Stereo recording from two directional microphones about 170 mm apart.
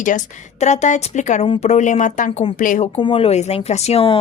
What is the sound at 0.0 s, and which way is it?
A woman's voice, 50° left (ahead or behind).